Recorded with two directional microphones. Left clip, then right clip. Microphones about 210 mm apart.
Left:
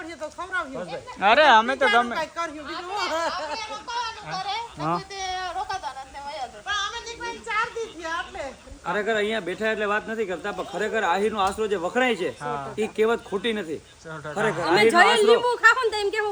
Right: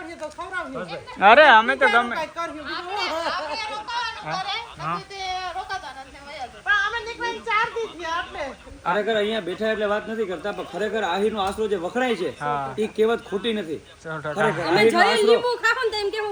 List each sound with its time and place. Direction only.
1.2 s speech: 5° left (ahead or behind)
2.6 s speech: 35° left (ahead or behind)
4.3 s speech: 50° left (ahead or behind)
4.8 s speech: 30° left (ahead or behind)
5.3 s a sound: 10° left (ahead or behind)
6.7 s music: 30° right (ahead or behind); by 8.4 s 50° right (ahead or behind)
8.9 s speech: centre (ahead or behind)